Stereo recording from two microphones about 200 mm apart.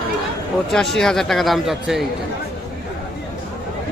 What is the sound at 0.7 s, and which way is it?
Speech, centre (ahead or behind).